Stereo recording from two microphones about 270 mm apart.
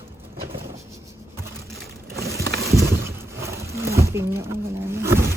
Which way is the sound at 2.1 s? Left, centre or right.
Right.